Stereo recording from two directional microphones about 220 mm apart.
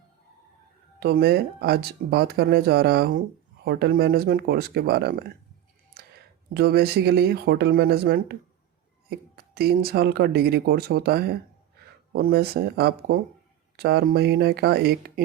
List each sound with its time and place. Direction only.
0.9 s speech: 45° right (ahead or behind)
6.5 s speech: 50° right (ahead or behind)